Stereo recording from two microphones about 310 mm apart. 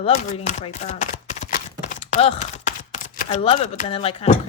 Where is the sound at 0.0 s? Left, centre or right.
Left.